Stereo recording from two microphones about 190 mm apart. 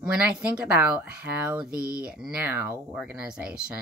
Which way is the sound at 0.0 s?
5° right (ahead or behind).